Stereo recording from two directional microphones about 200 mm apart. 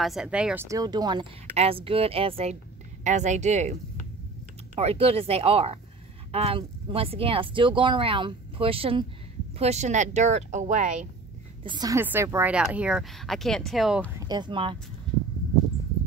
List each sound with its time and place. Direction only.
0.0 s speech: centre (ahead or behind)
0.7 s speech: 20° right (ahead or behind); by 3.7 s 35° right (ahead or behind)
4.7 s speech: 30° right (ahead or behind)
11.6 s speech: 20° right (ahead or behind); by 14.1 s centre (ahead or behind)
14.1 s speech: 20° right (ahead or behind)